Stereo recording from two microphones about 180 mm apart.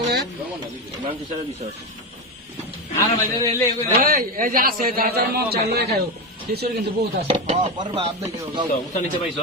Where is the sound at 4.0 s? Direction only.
55° right (ahead or behind).